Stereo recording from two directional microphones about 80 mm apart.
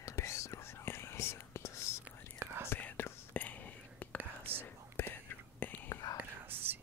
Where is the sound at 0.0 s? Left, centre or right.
Left.